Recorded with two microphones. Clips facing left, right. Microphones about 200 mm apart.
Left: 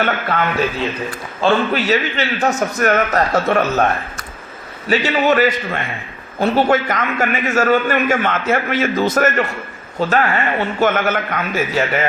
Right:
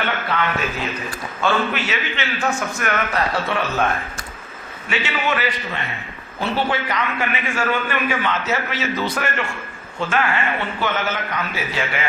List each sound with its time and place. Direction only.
0.3 s a man's voice: 50° left (ahead or behind)
1.4 s a man's voice: 35° left (ahead or behind)
4.9 s a man's voice: 40° left (ahead or behind)